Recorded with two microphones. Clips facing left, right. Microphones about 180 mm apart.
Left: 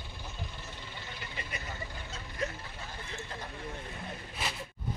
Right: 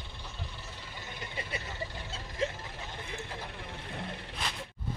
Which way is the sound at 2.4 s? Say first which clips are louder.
Right 3 dB; 25° right (ahead or behind).